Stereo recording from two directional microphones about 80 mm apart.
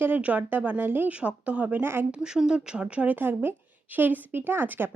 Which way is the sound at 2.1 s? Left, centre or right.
Centre.